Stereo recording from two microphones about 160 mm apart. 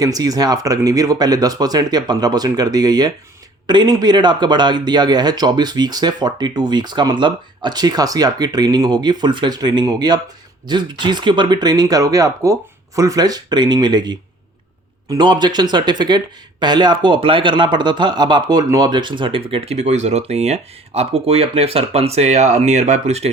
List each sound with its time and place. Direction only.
0.0 s speech: 20° right (ahead or behind); by 23.3 s 45° right (ahead or behind)